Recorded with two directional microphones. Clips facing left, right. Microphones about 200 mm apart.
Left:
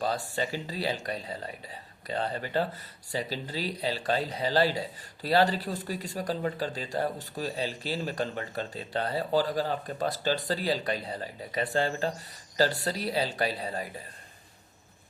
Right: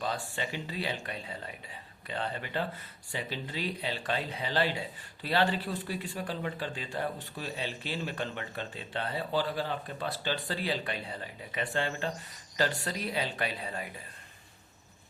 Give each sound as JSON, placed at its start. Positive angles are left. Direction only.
{"t": 0.0, "sound": "speech", "side_deg": 40}